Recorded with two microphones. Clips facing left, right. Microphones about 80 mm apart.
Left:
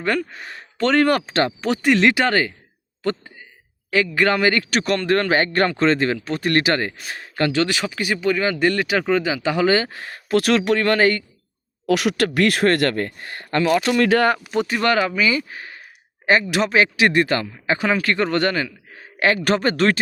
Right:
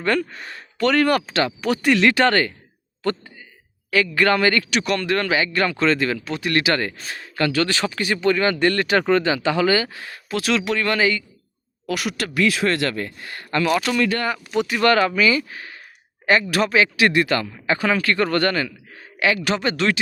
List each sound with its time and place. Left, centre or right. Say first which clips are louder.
0.0 s speech: right 1 dB; centre
0.4 s a man's voice: even; left
4.7 s speech: left 2 dB; left
7.8 s speech: right 1 dB; centre; by 10.2 s left
10.2 s speech: left 5 dB; left
11.9 s speech: left 7 dB; left
13.1 s speech: left 1 dB; left
14.0 s speech: left 5 dB; left
14.5 s speech: even; left
14.8 s speech: right 3 dB; centre
19.5 s speech: left 3 dB; left